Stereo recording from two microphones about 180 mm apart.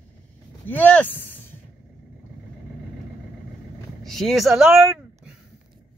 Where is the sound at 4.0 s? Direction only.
Centre (ahead or behind).